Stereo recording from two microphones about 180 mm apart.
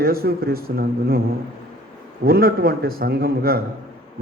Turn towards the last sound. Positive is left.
turn(degrees=-55)  # may be behind; listen again after turning